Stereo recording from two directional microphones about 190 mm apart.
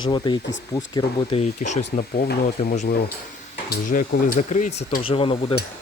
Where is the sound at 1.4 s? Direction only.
40° left (ahead or behind).